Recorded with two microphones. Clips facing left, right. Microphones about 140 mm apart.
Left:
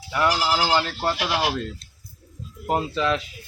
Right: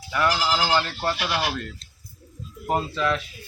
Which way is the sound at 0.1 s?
10° left (ahead or behind).